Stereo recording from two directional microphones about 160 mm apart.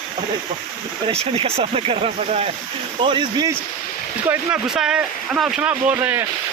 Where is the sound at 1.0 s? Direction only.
40° right (ahead or behind).